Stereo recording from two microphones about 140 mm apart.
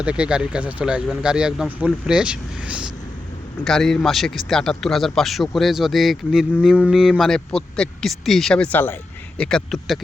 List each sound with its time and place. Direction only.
0.0 s speech: 5° right (ahead or behind)
3.6 s speech: 5° left (ahead or behind)